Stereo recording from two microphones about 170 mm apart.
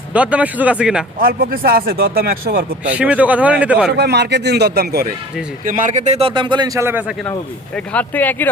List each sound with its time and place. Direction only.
0.1 s speech: 10° right (ahead or behind)
1.2 s speech: 60° right (ahead or behind)
2.9 s speech: 10° right (ahead or behind)
3.9 s speech: 75° right (ahead or behind)
5.6 s speech: 50° right (ahead or behind); by 6.8 s 25° right (ahead or behind)
7.9 s speech: 10° left (ahead or behind)